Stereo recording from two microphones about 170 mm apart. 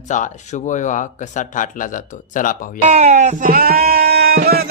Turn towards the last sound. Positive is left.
turn(degrees=-65)  # may be behind; listen again after turning